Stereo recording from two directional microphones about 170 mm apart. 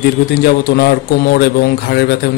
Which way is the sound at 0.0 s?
70° left (ahead or behind).